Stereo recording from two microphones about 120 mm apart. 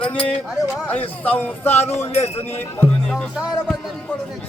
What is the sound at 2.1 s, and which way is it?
Speech, 60° left (ahead or behind).